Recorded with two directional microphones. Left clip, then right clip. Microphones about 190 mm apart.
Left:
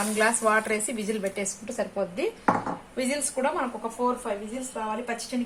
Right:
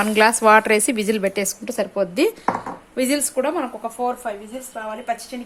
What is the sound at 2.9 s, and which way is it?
Speech, 45° right (ahead or behind).